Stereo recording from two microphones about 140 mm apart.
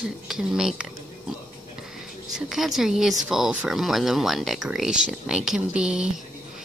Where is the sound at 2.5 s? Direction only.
Centre (ahead or behind).